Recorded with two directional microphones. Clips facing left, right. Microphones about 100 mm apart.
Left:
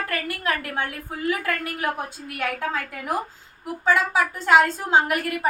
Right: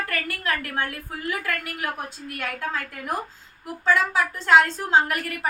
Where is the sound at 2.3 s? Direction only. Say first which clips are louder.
Left 3 dB; 15° left (ahead or behind).